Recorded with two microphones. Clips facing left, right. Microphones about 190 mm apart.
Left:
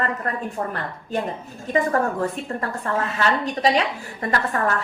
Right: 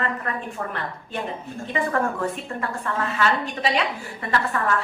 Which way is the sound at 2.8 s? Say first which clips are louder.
Left 1 dB; 40° left (ahead or behind).